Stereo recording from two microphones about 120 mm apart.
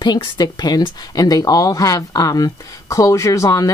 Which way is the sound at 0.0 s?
35° left (ahead or behind).